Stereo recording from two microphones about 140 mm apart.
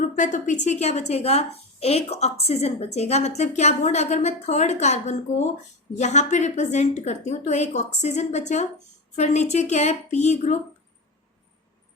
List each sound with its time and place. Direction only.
0.2 s a woman's voice: 65° left (ahead or behind)